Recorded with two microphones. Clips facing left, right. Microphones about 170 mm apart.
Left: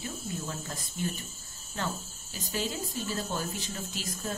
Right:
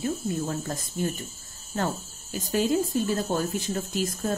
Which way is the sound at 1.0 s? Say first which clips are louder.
Right 5 dB; 40° right (ahead or behind).